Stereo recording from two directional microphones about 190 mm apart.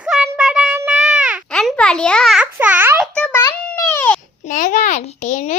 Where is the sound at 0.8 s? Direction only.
5° right (ahead or behind).